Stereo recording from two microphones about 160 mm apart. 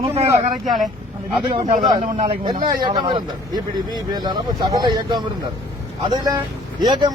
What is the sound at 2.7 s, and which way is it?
Speech, 25° right (ahead or behind).